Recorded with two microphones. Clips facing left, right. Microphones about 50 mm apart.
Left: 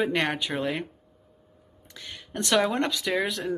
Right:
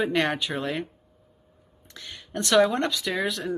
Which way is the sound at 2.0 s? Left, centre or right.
Centre.